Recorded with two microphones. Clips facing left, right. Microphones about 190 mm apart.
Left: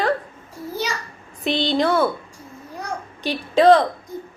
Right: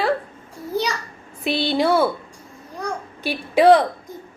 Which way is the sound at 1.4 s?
10° right (ahead or behind).